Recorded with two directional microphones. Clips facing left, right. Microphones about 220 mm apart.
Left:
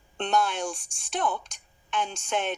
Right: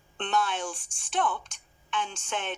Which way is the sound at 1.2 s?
40° left (ahead or behind).